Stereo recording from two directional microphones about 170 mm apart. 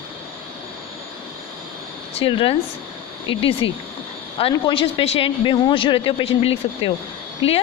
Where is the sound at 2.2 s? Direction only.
30° left (ahead or behind).